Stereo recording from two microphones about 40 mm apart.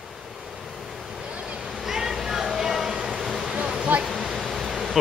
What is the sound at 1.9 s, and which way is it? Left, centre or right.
Music, centre.